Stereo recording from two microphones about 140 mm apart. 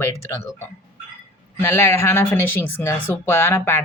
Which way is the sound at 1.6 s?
15° left (ahead or behind).